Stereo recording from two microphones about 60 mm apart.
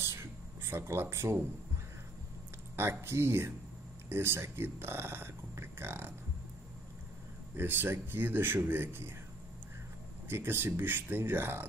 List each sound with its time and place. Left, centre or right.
0.0 s a sound: right
1.1 s speech: right
2.7 s speech: right
7.5 s speech: right
10.2 s speech: right